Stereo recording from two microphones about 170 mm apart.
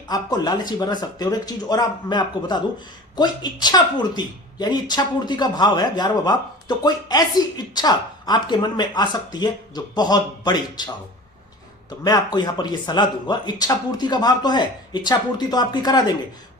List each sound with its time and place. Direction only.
0.1 s speech: 25° left (ahead or behind)
11.9 s speech: 25° left (ahead or behind)